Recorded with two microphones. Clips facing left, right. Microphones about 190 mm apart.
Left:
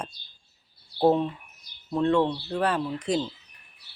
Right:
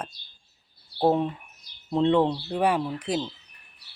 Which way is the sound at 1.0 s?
15° right (ahead or behind).